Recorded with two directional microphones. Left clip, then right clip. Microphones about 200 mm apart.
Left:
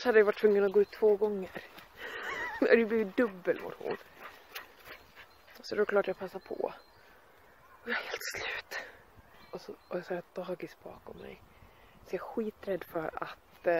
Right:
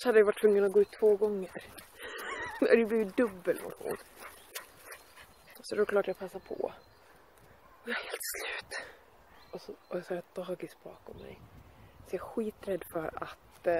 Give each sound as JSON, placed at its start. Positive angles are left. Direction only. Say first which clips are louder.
{"t": 0.0, "sound": "speech", "louder": "even", "side_deg": 5}
{"t": 1.4, "sound": "speech", "louder": "even", "side_deg": 5}
{"t": 3.5, "sound": "speech", "louder": "left 1 dB", "side_deg": 20}
{"t": 4.5, "sound": "mechanisms", "louder": "even", "side_deg": 15}
{"t": 5.6, "sound": "speech", "louder": "even", "side_deg": 5}
{"t": 7.8, "sound": "speech", "louder": "left 2 dB", "side_deg": 5}
{"t": 9.5, "sound": "speech", "louder": "even", "side_deg": 15}